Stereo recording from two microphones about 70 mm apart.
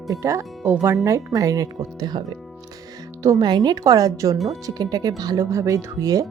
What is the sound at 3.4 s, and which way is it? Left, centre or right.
Speech, right.